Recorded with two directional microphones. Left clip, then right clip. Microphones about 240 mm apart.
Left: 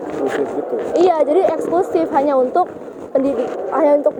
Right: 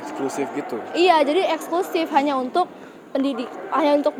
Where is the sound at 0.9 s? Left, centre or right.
Right.